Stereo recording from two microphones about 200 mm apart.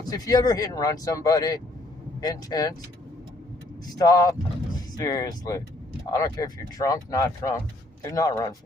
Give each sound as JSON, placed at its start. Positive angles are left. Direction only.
{"t": 0.1, "sound": "speech", "side_deg": 20}
{"t": 3.9, "sound": "speech", "side_deg": 20}